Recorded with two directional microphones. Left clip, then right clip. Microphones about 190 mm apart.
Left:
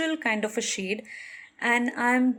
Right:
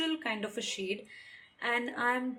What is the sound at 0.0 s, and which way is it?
Speech, 40° left (ahead or behind).